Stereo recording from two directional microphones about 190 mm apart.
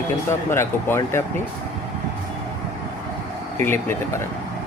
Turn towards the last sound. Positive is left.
turn(degrees=10)  # may be behind; listen again after turning